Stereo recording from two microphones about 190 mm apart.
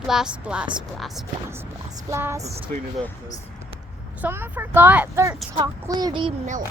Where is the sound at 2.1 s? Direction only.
15° right (ahead or behind).